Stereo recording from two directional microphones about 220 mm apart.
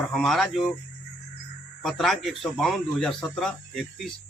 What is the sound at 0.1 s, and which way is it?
Speech, centre (ahead or behind).